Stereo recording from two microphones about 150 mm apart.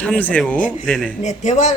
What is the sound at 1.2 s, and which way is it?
Speech, 50° left (ahead or behind).